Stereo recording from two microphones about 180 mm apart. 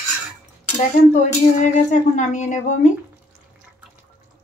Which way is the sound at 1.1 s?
45° left (ahead or behind).